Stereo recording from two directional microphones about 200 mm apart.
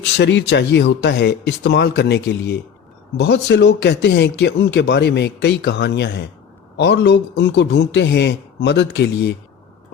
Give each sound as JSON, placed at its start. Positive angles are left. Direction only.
{"t": 0.2, "sound": "speech", "side_deg": 60}